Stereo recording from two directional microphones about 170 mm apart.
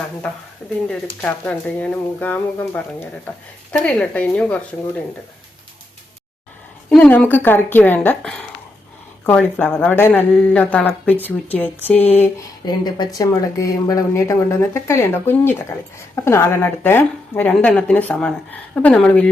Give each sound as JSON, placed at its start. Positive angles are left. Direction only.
{"t": 1.2, "sound": "speech", "side_deg": 10}
{"t": 6.9, "sound": "speech", "side_deg": 5}
{"t": 12.6, "sound": "speech", "side_deg": 25}